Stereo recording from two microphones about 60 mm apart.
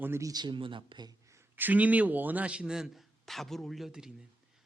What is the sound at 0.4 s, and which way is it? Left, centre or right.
Speech, right.